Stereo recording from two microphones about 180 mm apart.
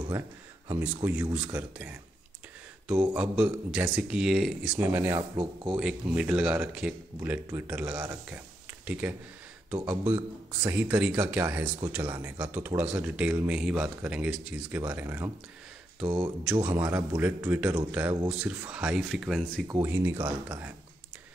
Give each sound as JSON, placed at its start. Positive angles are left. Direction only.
{"t": 0.7, "sound": "a man's voice", "side_deg": -10}
{"t": 3.1, "sound": "speech", "side_deg": -5}
{"t": 5.4, "sound": "speech", "side_deg": -30}
{"t": 5.8, "sound": "a man's voice", "side_deg": -5}
{"t": 19.7, "sound": "a man's voice", "side_deg": -15}